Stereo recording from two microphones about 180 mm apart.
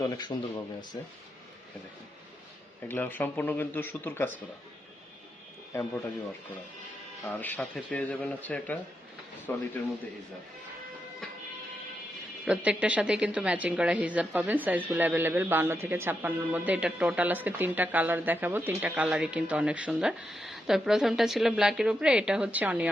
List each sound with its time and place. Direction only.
0.0 s speech: 20° left (ahead or behind)
2.9 s speech: 10° left (ahead or behind)
5.7 s speech: 15° left (ahead or behind)
7.3 s speech: 10° left (ahead or behind)
12.5 s speech: 5° right (ahead or behind)